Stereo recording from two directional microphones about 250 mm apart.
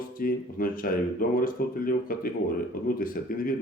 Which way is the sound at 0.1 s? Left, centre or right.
Left.